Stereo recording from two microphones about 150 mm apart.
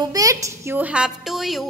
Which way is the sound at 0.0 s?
25° right (ahead or behind).